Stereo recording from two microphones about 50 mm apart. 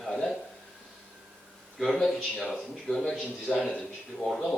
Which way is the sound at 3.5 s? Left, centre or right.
Centre.